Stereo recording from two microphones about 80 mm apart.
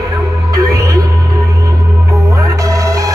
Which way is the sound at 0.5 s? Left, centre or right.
Right.